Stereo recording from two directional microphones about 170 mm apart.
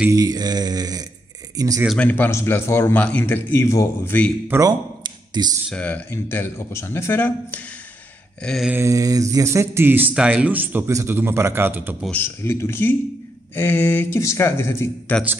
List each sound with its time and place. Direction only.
0.1 s mantra: 20° right (ahead or behind)
2.0 s a man's voice: 10° left (ahead or behind)
4.5 s speech: 20° right (ahead or behind)
5.7 s a man's voice: 10° left (ahead or behind)
8.5 s a sound: centre (ahead or behind)
8.7 s speech: 20° right (ahead or behind)
12.1 s a man's voice: 15° left (ahead or behind)